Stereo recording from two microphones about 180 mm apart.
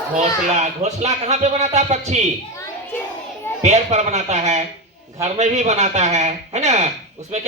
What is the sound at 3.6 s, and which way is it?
Speech, 40° right (ahead or behind).